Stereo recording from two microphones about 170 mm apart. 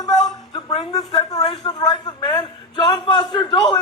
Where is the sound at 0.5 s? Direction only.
35° left (ahead or behind).